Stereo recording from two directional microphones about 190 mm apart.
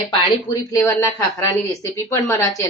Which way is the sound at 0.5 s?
15° left (ahead or behind).